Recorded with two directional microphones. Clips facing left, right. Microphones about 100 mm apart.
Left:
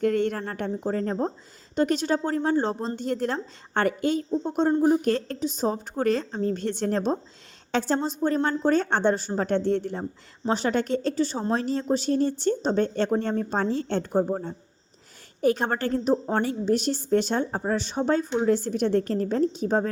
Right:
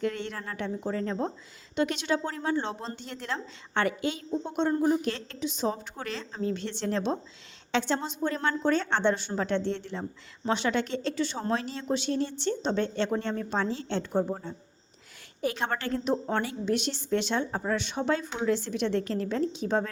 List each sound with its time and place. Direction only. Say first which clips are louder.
0.0 s a woman's voice: left 8 dB; 50° left (ahead or behind); by 4.9 s 30° left (ahead or behind)
5.0 s a woman's voice: left 7 dB; 45° left (ahead or behind)